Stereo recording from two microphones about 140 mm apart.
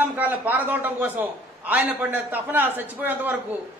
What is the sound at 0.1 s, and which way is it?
A man's voice, 10° right (ahead or behind).